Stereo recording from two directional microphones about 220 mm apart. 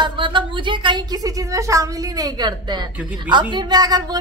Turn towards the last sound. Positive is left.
turn(degrees=-20)  # may be behind; listen again after turning